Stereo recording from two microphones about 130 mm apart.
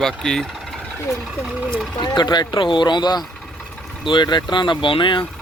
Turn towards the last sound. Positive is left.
turn(degrees=40)  # may be behind; listen again after turning